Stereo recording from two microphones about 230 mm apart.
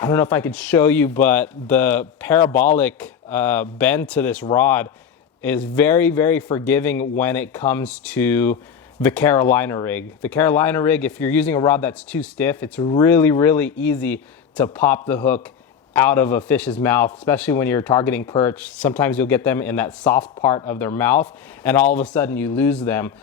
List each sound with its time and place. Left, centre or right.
0.0 s a man's voice: centre
12.8 s speech: left
13.1 s a man's voice: centre